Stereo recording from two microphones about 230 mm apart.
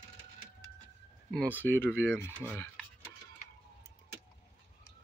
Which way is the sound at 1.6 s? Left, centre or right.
Centre.